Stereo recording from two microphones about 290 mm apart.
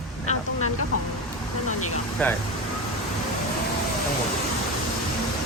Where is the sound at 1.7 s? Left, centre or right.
Left.